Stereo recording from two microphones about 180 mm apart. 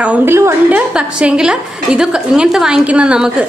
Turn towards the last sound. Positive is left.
turn(degrees=-5)  # may be behind; listen again after turning